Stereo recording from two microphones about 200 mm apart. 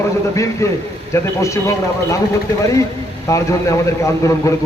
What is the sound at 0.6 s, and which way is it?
A man's voice, 15° left (ahead or behind).